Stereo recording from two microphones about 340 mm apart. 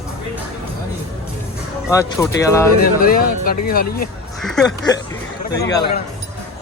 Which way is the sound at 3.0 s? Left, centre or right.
Left.